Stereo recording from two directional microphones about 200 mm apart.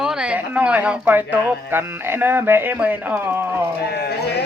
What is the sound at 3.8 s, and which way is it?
Sheep, 55° left (ahead or behind).